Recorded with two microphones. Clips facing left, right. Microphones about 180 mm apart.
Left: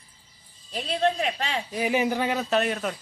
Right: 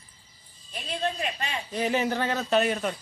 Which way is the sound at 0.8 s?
65° left (ahead or behind).